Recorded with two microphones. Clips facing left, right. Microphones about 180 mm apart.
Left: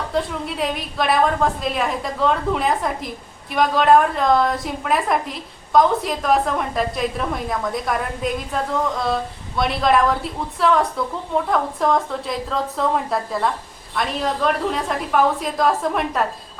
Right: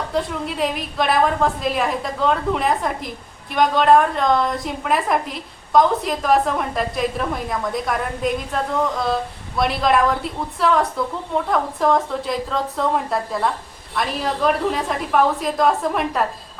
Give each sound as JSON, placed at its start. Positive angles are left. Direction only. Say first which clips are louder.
{"t": 0.1, "sound": "a woman's voice", "louder": "left 1 dB", "side_deg": 0}